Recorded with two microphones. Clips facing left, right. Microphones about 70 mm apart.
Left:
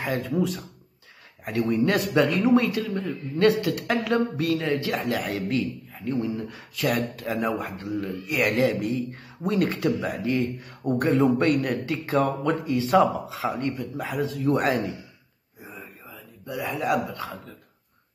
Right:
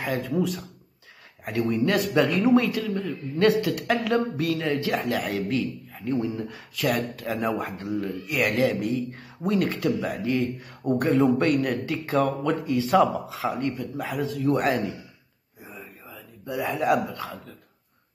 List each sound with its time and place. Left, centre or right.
0.0 s speech: centre
3.3 s speech: centre
15.6 s whispering: centre
16.4 s speech: centre